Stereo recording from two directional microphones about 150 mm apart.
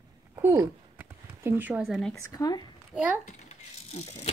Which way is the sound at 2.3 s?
25° left (ahead or behind).